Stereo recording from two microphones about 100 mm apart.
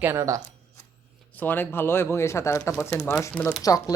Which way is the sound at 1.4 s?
20° left (ahead or behind).